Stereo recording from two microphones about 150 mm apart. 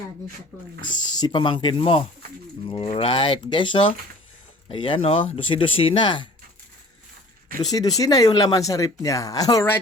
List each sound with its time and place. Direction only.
0.9 s speech: 25° left (ahead or behind)
7.6 s speech: 25° left (ahead or behind)